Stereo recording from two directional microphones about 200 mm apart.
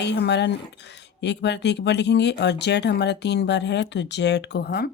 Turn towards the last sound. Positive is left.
turn(degrees=55)  # may be behind; listen again after turning